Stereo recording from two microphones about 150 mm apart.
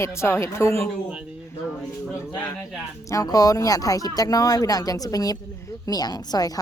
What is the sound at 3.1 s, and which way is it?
Speech, 25° left (ahead or behind).